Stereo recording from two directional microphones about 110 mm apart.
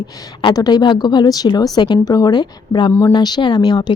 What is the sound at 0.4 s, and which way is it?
A woman's voice, 40° left (ahead or behind).